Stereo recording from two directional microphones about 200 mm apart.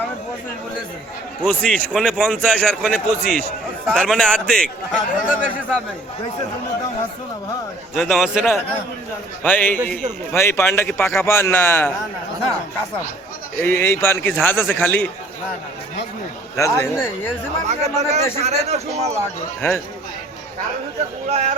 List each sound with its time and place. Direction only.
1.5 s a man's voice: 5° left (ahead or behind)
7.9 s a man's voice: centre (ahead or behind)
9.4 s speech: 10° left (ahead or behind)
13.6 s speech: 10° left (ahead or behind)
16.6 s speech: 15° left (ahead or behind)
17.7 s speech: 35° right (ahead or behind)
19.6 s speech: 10° left (ahead or behind)
21.2 s speech: 35° right (ahead or behind)